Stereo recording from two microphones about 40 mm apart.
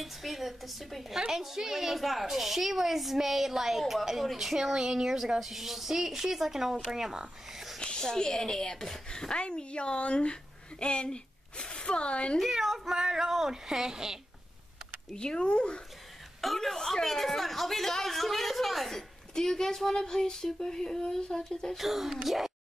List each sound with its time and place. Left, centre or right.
0.0 s speech: centre
7.5 s a sound: centre
7.8 s a woman's voice: centre
12.4 s speech: centre
15.1 s a woman's voice: left
16.3 s speech: centre
19.3 s speech: centre
21.7 s speech: centre